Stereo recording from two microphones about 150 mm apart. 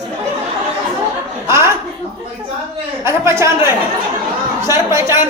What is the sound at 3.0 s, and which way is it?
Speech, 15° right (ahead or behind).